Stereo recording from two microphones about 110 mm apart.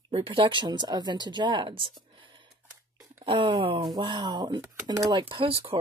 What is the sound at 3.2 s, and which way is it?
Speech, 50° right (ahead or behind).